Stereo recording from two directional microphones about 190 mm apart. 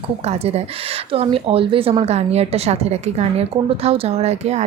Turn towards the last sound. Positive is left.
turn(degrees=-35)  # may be behind; listen again after turning